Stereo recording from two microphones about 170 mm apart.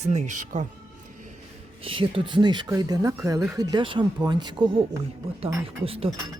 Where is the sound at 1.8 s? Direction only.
30° right (ahead or behind).